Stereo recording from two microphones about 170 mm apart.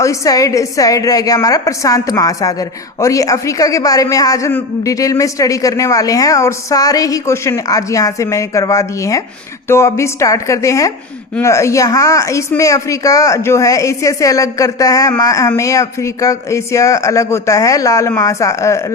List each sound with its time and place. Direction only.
0.0 s a woman's voice: 20° left (ahead or behind)